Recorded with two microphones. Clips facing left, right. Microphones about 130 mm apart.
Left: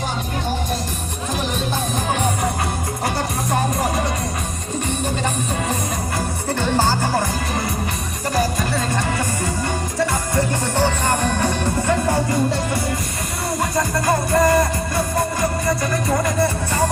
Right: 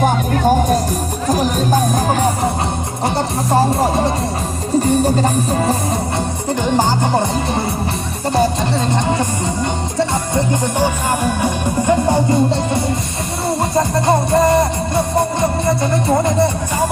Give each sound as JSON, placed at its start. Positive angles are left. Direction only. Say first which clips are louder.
{"t": 0.0, "sound": "music", "louder": "right 10 dB", "side_deg": -50}
{"t": 6.1, "sound": "music", "louder": "right 4 dB", "side_deg": -15}